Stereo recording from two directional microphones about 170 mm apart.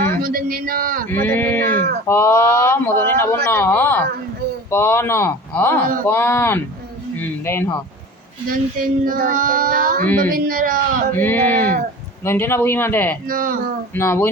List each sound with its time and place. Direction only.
0.2 s child singing: 55° right (ahead or behind)
1.1 s speech: 10° left (ahead or behind)
8.4 s child singing: 55° right (ahead or behind)
11.2 s speech: 10° left (ahead or behind)
13.2 s child singing: 55° right (ahead or behind)
13.9 s speech: 10° left (ahead or behind)